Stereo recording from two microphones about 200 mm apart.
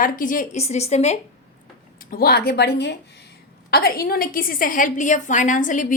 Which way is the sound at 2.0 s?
50° left (ahead or behind).